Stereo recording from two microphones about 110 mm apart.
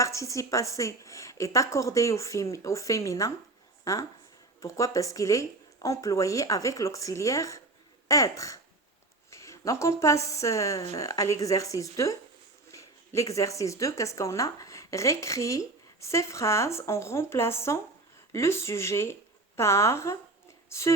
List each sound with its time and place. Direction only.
0.0 s a woman's voice: 30° left (ahead or behind)